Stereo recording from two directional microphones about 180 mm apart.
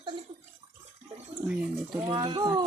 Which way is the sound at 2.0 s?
25° right (ahead or behind).